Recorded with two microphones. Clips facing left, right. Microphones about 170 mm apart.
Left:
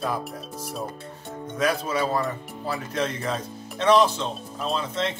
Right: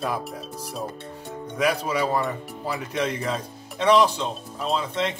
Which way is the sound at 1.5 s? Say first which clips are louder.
Right 1 dB; 15° right (ahead or behind).